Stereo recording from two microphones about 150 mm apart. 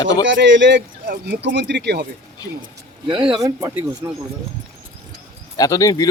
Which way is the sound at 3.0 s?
30° right (ahead or behind).